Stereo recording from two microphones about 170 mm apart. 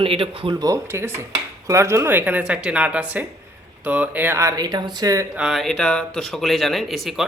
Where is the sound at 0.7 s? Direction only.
15° right (ahead or behind).